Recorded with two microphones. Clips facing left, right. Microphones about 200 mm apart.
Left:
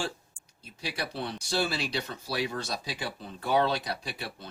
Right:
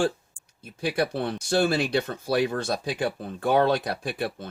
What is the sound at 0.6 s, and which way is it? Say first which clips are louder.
Speech: right 10 dB; 55° right (ahead or behind).